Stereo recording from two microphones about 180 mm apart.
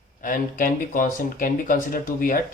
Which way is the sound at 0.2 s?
50° left (ahead or behind).